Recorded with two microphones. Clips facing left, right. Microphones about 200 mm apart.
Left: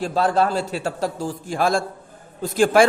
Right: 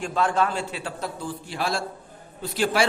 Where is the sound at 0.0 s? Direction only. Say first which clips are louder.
Left 4 dB; 35° left (ahead or behind).